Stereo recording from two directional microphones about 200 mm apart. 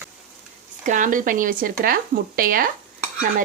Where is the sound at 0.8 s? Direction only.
40° right (ahead or behind).